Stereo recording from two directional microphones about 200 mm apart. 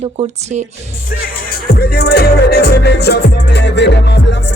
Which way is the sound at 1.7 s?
50° left (ahead or behind).